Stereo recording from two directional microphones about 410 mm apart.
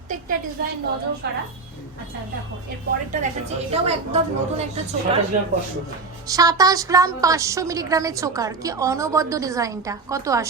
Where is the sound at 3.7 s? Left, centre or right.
Centre.